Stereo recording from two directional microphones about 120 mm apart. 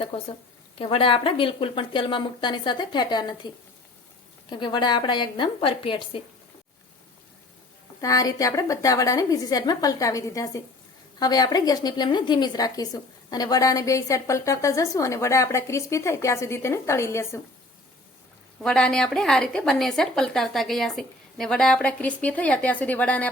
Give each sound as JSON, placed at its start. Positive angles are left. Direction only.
{"t": 0.8, "sound": "a woman's voice", "side_deg": 45}
{"t": 4.4, "sound": "a woman's voice", "side_deg": 40}
{"t": 8.0, "sound": "a woman's voice", "side_deg": 30}
{"t": 18.6, "sound": "a woman's voice", "side_deg": 5}